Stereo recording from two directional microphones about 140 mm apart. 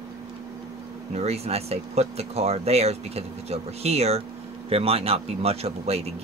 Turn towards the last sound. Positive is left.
turn(degrees=-45)  # may be behind; listen again after turning